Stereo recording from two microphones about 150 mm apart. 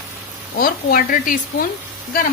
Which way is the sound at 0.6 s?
75° left (ahead or behind).